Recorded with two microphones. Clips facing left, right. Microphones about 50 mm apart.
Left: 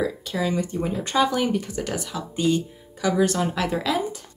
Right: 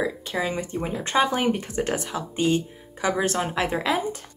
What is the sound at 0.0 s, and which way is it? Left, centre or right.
Speech, right.